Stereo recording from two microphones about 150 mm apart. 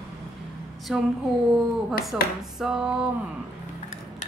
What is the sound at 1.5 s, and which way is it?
A woman's voice, 5° right (ahead or behind).